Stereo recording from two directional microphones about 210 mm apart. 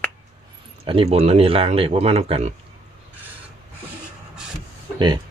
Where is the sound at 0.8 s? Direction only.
25° right (ahead or behind).